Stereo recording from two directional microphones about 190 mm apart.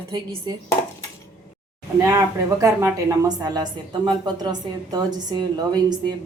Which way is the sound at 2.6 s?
15° right (ahead or behind).